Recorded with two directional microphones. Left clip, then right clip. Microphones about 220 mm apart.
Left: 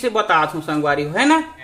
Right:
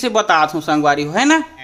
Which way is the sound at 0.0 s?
40° right (ahead or behind).